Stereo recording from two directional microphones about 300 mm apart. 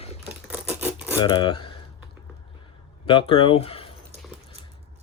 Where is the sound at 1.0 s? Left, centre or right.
Centre.